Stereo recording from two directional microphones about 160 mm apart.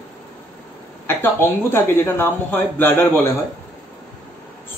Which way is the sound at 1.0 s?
15° left (ahead or behind).